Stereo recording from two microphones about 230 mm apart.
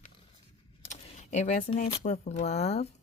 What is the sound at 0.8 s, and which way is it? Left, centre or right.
Speech, left.